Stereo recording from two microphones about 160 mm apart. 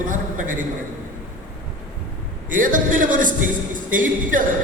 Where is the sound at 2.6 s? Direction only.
55° right (ahead or behind).